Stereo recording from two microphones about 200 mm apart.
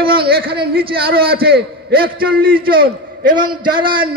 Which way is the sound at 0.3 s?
50° right (ahead or behind).